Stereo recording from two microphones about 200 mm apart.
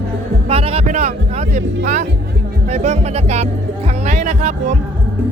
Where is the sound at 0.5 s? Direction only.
30° right (ahead or behind).